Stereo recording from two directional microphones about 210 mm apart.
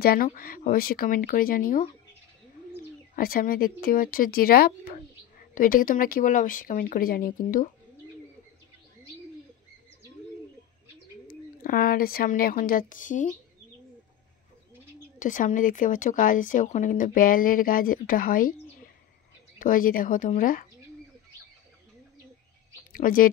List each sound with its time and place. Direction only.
0.0 s speech: 45° left (ahead or behind)
3.2 s speech: 45° left (ahead or behind)
11.6 s speech: 40° left (ahead or behind)
15.1 s speech: 40° left (ahead or behind)
19.6 s speech: 40° left (ahead or behind)
22.9 s speech: 40° left (ahead or behind)